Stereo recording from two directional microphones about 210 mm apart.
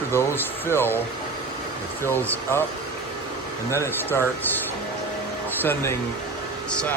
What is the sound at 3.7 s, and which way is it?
Speech, 15° left (ahead or behind).